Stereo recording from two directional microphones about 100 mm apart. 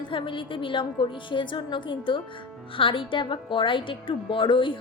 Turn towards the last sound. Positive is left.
turn(degrees=55)  # may be behind; listen again after turning